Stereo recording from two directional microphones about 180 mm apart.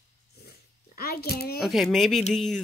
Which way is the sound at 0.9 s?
55° left (ahead or behind).